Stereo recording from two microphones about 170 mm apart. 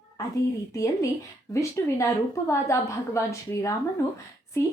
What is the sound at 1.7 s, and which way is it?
A woman's voice, 15° left (ahead or behind).